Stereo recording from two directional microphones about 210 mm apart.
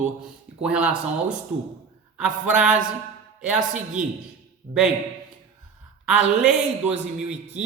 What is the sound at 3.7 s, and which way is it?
Speech, 35° right (ahead or behind).